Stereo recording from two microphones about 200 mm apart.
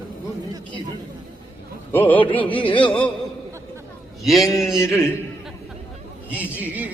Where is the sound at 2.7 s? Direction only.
25° left (ahead or behind).